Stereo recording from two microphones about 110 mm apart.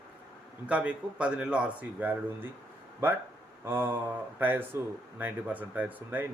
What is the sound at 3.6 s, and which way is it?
Speech, 20° right (ahead or behind).